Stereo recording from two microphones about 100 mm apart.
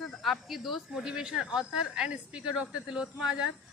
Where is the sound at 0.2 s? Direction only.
Centre (ahead or behind).